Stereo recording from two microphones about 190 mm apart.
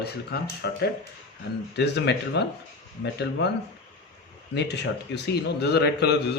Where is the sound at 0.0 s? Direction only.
60° left (ahead or behind).